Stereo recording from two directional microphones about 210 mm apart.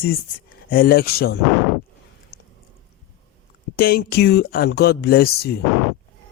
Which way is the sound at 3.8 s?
45° left (ahead or behind).